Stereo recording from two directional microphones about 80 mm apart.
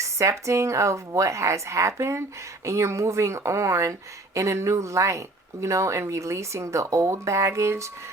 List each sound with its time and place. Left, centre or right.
0.0 s speech: right